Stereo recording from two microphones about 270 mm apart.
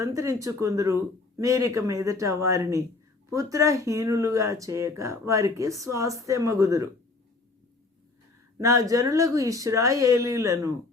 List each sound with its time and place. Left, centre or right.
0.0 s speech: centre
8.5 s speech: centre